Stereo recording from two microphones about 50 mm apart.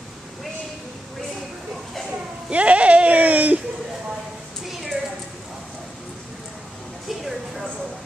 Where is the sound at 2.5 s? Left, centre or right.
Right.